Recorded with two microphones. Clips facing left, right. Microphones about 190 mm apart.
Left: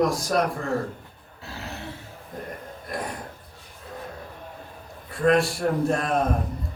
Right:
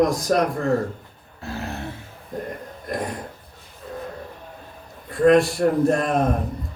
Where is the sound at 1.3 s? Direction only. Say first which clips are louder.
Right 7 dB; 50° right (ahead or behind).